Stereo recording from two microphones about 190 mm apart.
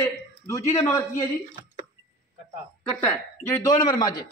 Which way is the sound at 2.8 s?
5° left (ahead or behind).